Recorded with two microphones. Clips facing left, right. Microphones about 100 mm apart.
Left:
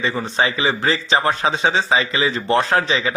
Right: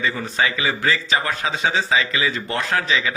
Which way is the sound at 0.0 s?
30° left (ahead or behind).